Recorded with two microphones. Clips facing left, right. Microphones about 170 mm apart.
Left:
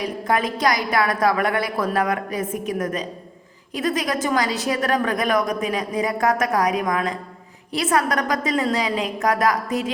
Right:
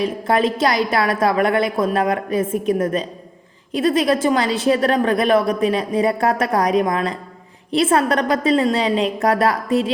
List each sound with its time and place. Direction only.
0.0 s a woman's voice: 25° right (ahead or behind)